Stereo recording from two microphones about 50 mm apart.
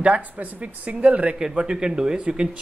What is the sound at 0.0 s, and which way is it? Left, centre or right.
Speech, right.